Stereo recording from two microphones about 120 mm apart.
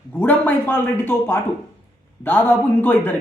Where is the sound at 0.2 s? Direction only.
15° left (ahead or behind).